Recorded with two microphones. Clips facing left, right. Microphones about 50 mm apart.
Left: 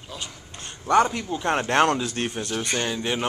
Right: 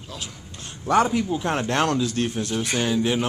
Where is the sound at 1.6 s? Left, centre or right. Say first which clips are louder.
Left 3 dB; centre.